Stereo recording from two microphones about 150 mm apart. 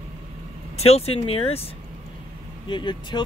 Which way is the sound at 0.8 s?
45° left (ahead or behind).